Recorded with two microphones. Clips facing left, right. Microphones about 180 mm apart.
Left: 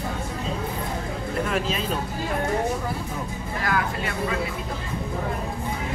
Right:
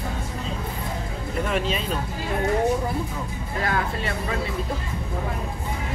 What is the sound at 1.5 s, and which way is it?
Speech, centre (ahead or behind).